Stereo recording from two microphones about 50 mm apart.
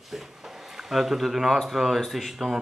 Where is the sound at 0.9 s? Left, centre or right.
Centre.